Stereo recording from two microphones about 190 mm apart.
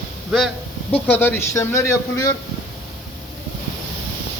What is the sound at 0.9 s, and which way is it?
A man's voice, 10° left (ahead or behind).